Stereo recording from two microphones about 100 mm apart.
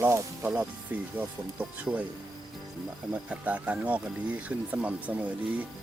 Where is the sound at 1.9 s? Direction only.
10° right (ahead or behind).